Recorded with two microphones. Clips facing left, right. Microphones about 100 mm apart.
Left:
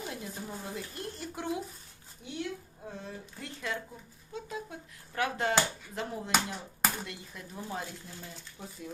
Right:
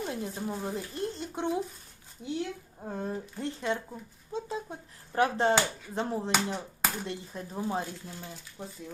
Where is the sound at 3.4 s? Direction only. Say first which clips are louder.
Right 5 dB; 30° right (ahead or behind).